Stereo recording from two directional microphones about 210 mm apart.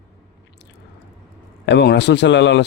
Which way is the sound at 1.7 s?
55° left (ahead or behind).